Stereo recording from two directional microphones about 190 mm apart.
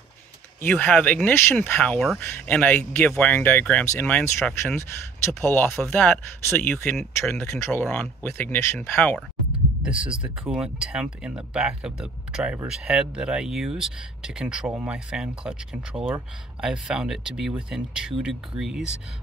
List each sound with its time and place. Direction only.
0.6 s speech: 5° left (ahead or behind)
10.2 s speech: 5° right (ahead or behind)